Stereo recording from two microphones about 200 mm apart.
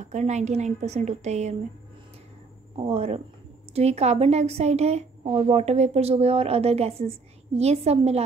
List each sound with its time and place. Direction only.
0.0 s a woman's voice: 35° right (ahead or behind)
2.9 s a woman's voice: 30° right (ahead or behind)